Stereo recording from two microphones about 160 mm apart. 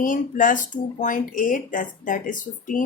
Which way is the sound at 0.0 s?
55° left (ahead or behind).